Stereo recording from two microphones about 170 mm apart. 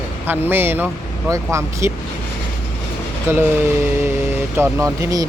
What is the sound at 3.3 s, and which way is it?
Speech, 15° right (ahead or behind).